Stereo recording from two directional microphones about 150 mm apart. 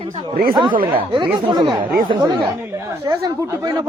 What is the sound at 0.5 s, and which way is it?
Speech, 30° right (ahead or behind).